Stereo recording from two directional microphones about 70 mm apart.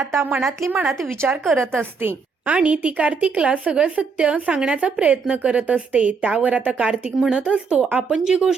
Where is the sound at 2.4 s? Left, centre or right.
Centre.